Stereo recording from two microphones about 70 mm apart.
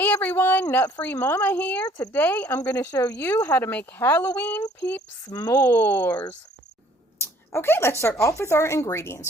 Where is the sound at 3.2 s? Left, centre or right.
Left.